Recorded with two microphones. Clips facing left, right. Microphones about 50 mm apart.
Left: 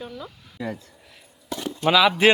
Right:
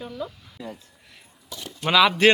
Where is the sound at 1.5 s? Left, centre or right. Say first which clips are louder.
Left 9 dB; left.